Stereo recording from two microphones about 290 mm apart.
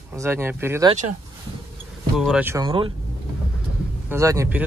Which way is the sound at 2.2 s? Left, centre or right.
Centre.